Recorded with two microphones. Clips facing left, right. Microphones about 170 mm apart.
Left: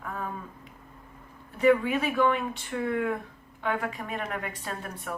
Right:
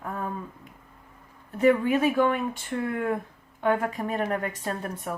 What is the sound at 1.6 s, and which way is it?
A woman's voice, 45° right (ahead or behind).